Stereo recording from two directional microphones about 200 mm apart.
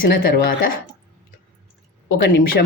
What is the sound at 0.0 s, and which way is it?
Speech, 45° left (ahead or behind).